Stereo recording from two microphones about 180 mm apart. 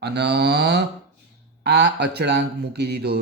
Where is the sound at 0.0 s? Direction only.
65° right (ahead or behind).